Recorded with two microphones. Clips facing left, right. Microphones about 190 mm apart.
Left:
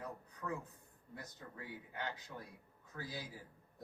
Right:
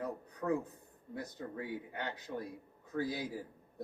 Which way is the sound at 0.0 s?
60° right (ahead or behind).